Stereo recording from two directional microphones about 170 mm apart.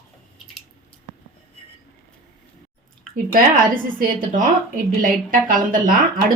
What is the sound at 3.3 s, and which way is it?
A woman's voice, 55° right (ahead or behind).